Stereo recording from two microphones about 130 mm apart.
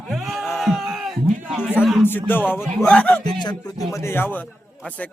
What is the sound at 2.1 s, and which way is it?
A man's voice, 15° left (ahead or behind).